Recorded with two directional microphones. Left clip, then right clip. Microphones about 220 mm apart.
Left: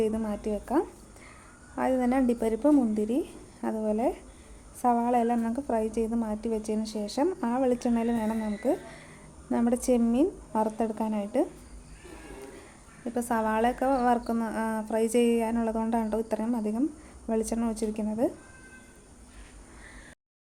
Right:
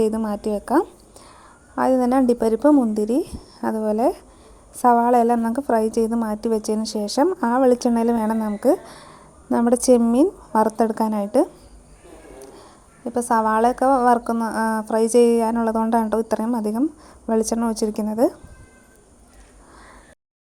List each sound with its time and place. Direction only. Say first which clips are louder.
0.0 s a woman's voice: right 7 dB; 30° right (ahead or behind)
13.1 s a woman's voice: right 9 dB; 20° right (ahead or behind)